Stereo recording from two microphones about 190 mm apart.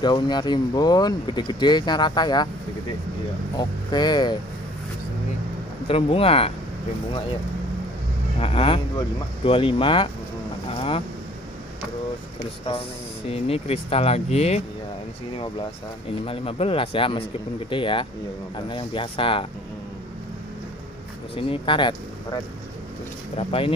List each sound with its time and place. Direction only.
0.0 s speech: 20° left (ahead or behind)
3.5 s speech: 20° left (ahead or behind)
5.9 s speech: 30° left (ahead or behind)
8.4 s speech: 30° left (ahead or behind)
10.7 s vehicle: 30° left (ahead or behind)
12.4 s speech: 30° left (ahead or behind)
16.3 s speech: 30° left (ahead or behind)
21.4 s speech: 25° left (ahead or behind)